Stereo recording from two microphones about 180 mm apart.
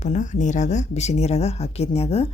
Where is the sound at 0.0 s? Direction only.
40° left (ahead or behind).